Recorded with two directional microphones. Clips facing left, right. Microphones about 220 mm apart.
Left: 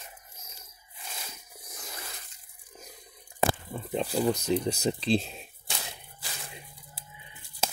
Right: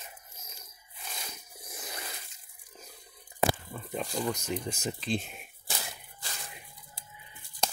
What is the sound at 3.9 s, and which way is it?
Speech, 30° left (ahead or behind).